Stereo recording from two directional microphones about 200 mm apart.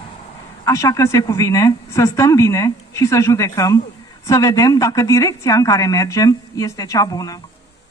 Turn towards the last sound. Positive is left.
turn(degrees=20)  # may be behind; listen again after turning